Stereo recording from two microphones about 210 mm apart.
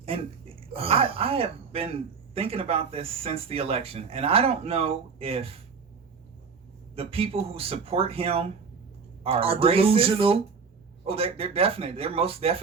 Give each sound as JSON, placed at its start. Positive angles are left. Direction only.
{"t": 0.0, "sound": "speech", "side_deg": -25}
{"t": 6.9, "sound": "speech", "side_deg": -25}